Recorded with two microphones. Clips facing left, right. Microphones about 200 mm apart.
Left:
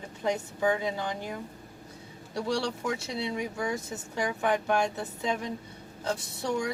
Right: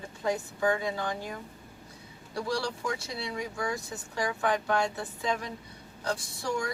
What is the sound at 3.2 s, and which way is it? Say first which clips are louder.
Speech: left 2 dB; 20° left (ahead or behind).